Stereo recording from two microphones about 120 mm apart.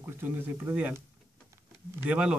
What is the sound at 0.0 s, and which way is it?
Speech, 15° right (ahead or behind).